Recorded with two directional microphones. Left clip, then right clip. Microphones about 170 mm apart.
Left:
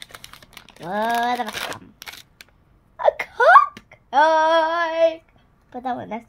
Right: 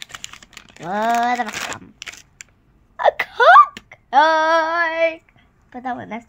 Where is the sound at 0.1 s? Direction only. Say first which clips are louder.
Right 5 dB; 10° left (ahead or behind).